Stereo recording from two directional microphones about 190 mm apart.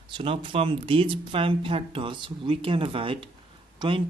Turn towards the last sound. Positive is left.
turn(degrees=-25)  # may be behind; listen again after turning